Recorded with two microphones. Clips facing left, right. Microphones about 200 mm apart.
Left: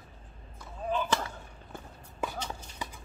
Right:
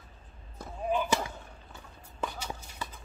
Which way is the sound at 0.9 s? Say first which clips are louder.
Right 1 dB; 15° right (ahead or behind).